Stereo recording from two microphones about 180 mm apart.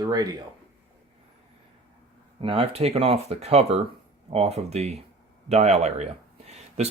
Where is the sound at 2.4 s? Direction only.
30° right (ahead or behind).